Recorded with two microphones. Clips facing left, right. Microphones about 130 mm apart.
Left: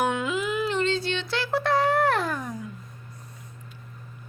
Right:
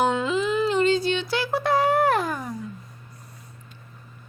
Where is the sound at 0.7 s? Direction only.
5° right (ahead or behind).